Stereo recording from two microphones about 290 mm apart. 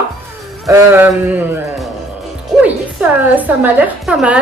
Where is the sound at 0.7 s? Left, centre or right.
Centre.